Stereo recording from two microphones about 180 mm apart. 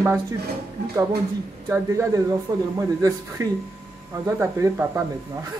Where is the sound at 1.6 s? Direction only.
15° right (ahead or behind).